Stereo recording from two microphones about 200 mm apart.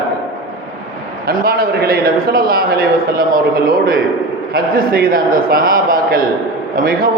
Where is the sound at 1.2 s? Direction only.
50° right (ahead or behind).